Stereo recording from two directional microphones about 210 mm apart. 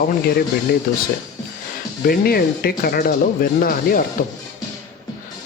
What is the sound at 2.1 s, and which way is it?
Speech, 45° left (ahead or behind).